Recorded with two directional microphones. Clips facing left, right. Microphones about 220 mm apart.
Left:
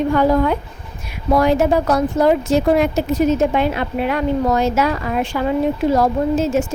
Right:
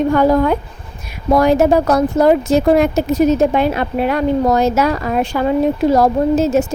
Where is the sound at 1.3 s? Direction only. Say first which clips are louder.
Right 3 dB; 45° right (ahead or behind).